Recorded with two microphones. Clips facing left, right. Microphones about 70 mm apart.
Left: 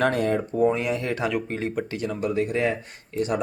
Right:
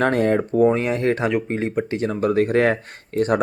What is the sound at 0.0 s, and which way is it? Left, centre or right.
Speech, right.